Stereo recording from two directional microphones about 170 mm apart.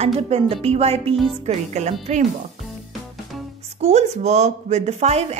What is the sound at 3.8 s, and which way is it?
A woman's voice, 40° right (ahead or behind).